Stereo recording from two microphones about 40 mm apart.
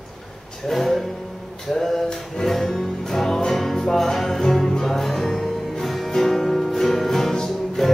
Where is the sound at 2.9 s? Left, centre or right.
Centre.